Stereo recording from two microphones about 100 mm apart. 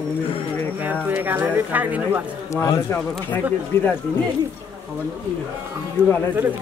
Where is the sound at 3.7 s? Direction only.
25° left (ahead or behind).